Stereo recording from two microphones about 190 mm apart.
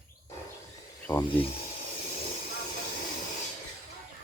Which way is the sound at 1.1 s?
20° left (ahead or behind).